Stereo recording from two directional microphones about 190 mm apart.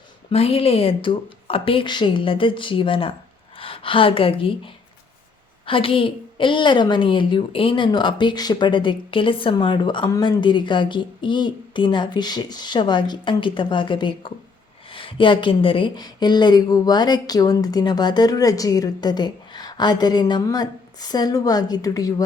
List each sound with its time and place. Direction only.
0.3 s a woman's voice: 30° left (ahead or behind)